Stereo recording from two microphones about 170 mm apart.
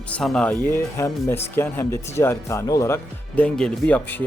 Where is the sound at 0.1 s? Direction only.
5° left (ahead or behind).